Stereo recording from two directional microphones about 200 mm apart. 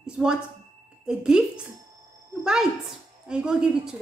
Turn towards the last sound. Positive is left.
turn(degrees=-5)  # may be behind; listen again after turning